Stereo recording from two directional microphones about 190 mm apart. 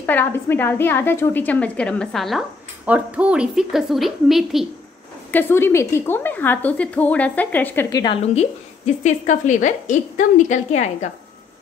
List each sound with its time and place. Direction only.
0.0 s a woman's voice: 10° left (ahead or behind)
5.3 s a woman's voice: 10° left (ahead or behind)
8.0 s speech: 25° left (ahead or behind)
9.0 s a woman's voice: 40° left (ahead or behind)